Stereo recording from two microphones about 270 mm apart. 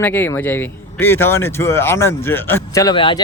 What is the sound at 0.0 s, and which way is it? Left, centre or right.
Speech, centre.